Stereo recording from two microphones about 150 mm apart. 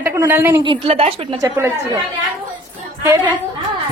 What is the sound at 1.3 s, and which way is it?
Speech, 20° right (ahead or behind).